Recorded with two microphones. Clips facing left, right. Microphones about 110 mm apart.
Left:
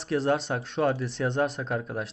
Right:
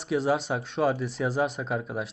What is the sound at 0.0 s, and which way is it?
Speech, centre (ahead or behind).